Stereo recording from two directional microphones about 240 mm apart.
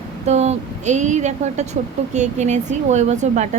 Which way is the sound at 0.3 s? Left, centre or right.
Right.